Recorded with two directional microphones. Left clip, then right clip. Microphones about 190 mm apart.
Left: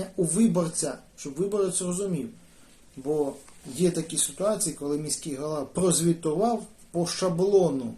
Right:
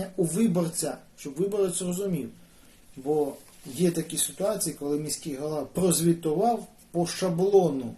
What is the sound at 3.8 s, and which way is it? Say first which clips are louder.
Speech: left 1 dB; 10° left (ahead or behind).